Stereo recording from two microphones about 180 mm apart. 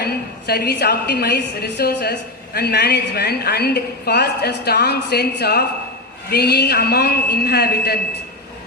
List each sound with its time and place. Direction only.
0.0 s a woman's voice: 60° left (ahead or behind)